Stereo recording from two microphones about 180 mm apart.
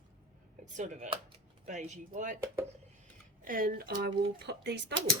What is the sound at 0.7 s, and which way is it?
Speech, 40° right (ahead or behind).